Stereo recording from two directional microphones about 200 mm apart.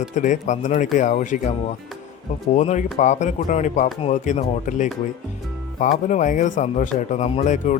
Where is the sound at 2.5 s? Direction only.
35° left (ahead or behind).